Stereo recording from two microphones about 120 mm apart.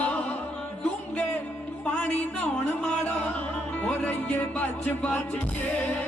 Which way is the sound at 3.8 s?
10° left (ahead or behind).